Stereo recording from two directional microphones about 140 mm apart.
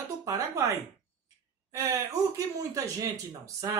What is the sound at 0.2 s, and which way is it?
Speech, 15° right (ahead or behind).